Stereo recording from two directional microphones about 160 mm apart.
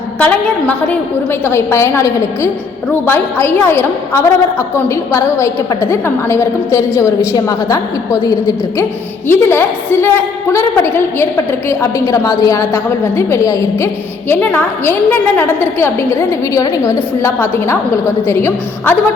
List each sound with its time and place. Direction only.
0.2 s a woman's voice: 10° left (ahead or behind)